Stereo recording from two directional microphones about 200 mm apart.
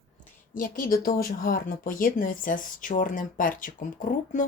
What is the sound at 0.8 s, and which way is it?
Speech, 45° left (ahead or behind).